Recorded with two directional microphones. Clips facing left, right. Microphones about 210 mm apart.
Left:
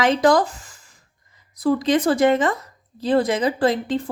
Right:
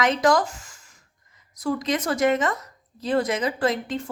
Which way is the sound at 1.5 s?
35° left (ahead or behind).